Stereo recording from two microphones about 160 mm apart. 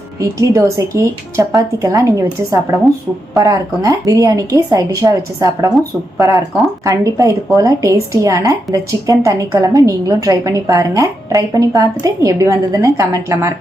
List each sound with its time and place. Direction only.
0.2 s a woman's voice: 20° right (ahead or behind)